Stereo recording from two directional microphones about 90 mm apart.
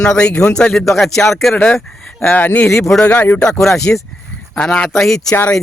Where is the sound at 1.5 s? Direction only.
15° left (ahead or behind); by 2.9 s 30° left (ahead or behind).